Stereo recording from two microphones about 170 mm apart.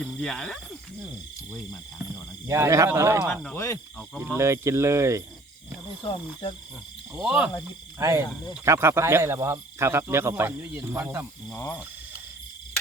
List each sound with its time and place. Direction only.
0.0 s speech: centre (ahead or behind)
2.5 s speech: 15° right (ahead or behind)
3.2 s speech: 5° left (ahead or behind)
4.2 s speech: 15° right (ahead or behind)
6.0 s cricket: 30° left (ahead or behind)
7.2 s speech: 5° right (ahead or behind)
7.9 s speech: 15° right (ahead or behind)
11.4 s speech: 10° left (ahead or behind)